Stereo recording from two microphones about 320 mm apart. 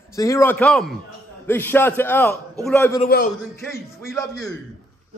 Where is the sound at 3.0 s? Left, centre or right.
Left.